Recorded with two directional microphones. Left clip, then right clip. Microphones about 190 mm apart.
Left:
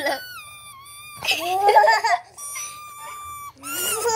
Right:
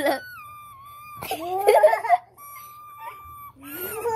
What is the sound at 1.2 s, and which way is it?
Speech, 40° left (ahead or behind).